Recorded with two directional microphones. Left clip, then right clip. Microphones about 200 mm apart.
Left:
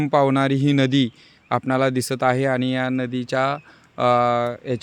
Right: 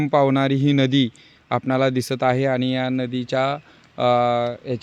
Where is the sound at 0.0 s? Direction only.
5° right (ahead or behind).